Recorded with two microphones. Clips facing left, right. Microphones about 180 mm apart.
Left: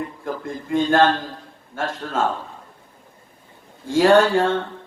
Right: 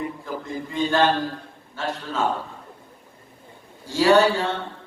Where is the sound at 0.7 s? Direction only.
50° left (ahead or behind).